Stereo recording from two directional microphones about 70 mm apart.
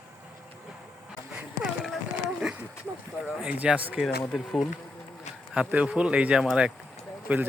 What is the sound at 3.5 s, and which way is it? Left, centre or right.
Speech, centre.